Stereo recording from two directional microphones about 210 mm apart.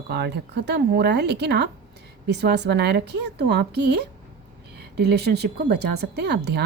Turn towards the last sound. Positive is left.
turn(degrees=-55)  # may be behind; listen again after turning